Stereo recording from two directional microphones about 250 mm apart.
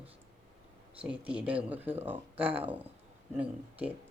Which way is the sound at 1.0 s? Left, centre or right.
Centre.